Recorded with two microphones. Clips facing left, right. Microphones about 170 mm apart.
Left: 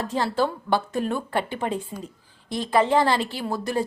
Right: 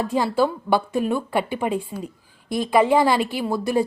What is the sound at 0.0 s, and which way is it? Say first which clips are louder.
Speech: right 4 dB; 10° right (ahead or behind).